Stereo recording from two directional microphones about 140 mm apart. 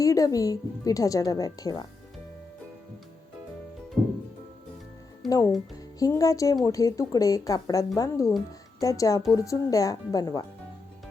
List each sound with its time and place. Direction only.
0.0 s speech: 25° left (ahead or behind)
5.2 s speech: centre (ahead or behind)
6.0 s speech: 25° left (ahead or behind)